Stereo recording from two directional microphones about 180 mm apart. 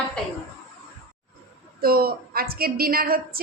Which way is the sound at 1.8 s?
55° right (ahead or behind).